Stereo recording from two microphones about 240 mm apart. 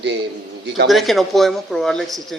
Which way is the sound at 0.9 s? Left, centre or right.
Centre.